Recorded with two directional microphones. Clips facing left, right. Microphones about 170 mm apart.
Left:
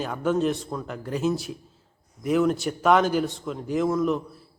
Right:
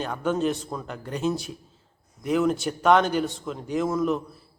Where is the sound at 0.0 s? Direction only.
5° left (ahead or behind).